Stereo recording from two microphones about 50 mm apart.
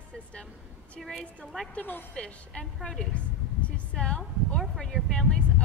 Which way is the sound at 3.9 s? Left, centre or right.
Centre.